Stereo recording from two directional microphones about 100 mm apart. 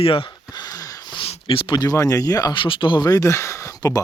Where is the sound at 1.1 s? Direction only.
65° left (ahead or behind).